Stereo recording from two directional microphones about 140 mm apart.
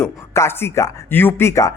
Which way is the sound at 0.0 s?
20° left (ahead or behind).